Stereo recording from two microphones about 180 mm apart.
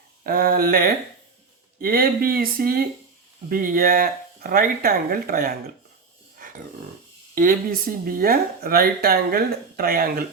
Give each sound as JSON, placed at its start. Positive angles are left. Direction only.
{"t": 0.3, "sound": "speech", "side_deg": -55}
{"t": 7.3, "sound": "speech", "side_deg": -50}